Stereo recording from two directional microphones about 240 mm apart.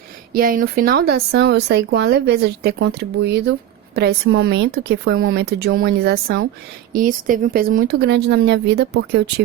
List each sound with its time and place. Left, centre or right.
0.3 s speech: right